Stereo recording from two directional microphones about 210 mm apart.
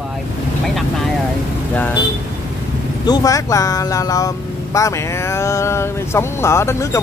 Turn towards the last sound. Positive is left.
turn(degrees=15)  # may be behind; listen again after turning